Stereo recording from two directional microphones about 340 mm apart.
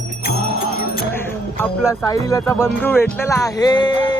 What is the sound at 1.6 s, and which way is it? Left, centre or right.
Speech, centre.